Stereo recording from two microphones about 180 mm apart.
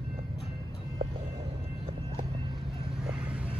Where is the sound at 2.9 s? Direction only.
5° right (ahead or behind).